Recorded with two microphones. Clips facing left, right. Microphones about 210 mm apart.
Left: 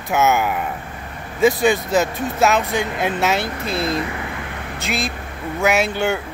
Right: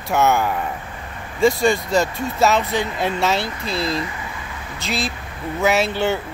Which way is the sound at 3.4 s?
55° left (ahead or behind).